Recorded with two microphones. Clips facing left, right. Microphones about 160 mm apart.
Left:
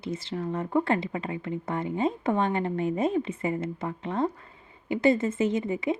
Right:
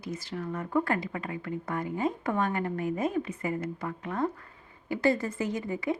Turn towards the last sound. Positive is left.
turn(degrees=20)  # may be behind; listen again after turning